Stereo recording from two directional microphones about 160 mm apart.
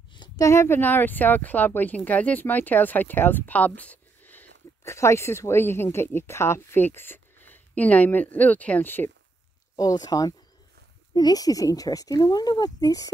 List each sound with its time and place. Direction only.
0.1 s speech: 25° left (ahead or behind)
9.8 s speech: 25° left (ahead or behind)